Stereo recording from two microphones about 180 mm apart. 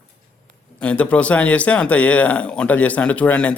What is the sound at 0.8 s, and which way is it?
Speech, 5° left (ahead or behind).